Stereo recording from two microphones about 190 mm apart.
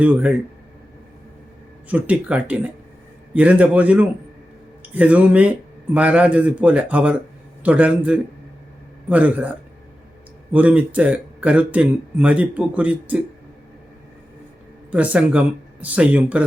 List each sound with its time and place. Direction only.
0.0 s speech: 5° right (ahead or behind)
1.9 s speech: 10° right (ahead or behind)
14.8 s speech: 5° right (ahead or behind)